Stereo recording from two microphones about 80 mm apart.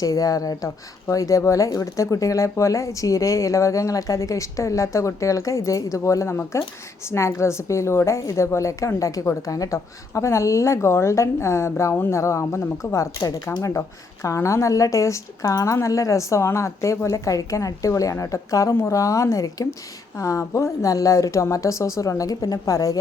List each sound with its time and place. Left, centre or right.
0.0 s speech: left
13.1 s speech: left
13.6 s speech: left